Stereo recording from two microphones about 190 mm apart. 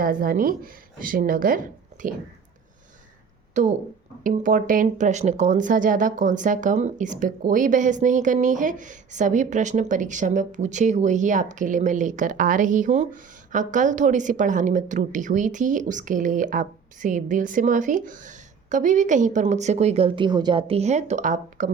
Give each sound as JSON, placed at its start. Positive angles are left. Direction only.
{"t": 0.0, "sound": "speech", "side_deg": -50}
{"t": 3.5, "sound": "speech", "side_deg": -40}